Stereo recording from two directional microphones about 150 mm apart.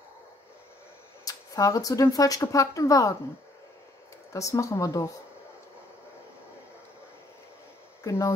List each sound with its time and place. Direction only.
1.2 s speech: 20° left (ahead or behind)
4.3 s speech: 20° left (ahead or behind)
8.0 s speech: 20° left (ahead or behind)